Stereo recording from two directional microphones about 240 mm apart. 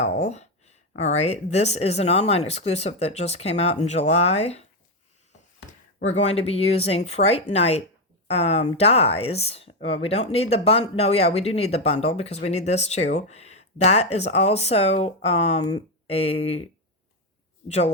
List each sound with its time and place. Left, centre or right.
0.0 s speech: left
6.1 s speech: left